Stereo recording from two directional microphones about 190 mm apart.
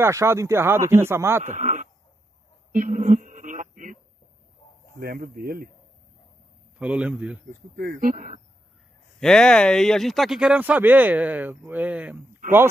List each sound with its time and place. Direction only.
0.0 s speech: 15° right (ahead or behind)
1.4 s a man's voice: 40° right (ahead or behind)
2.7 s a sound: 45° right (ahead or behind)
4.9 s speech: 55° right (ahead or behind)
6.8 s speech: 5° right (ahead or behind)
7.7 s speech: 45° right (ahead or behind)
9.2 s speech: 5° left (ahead or behind)
12.4 s a sound: 45° right (ahead or behind)